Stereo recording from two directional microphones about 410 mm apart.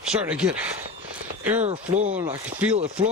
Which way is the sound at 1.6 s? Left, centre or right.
Centre.